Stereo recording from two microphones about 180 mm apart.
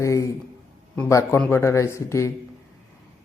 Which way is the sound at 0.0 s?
15° left (ahead or behind).